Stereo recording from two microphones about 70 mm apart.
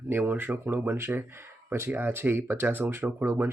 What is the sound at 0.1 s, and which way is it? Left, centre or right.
Speech, right.